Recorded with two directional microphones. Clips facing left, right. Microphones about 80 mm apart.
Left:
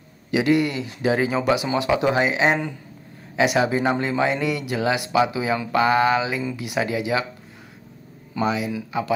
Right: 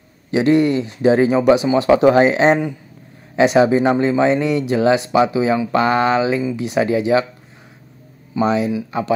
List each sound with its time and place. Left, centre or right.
0.3 s speech: right
8.5 s speech: right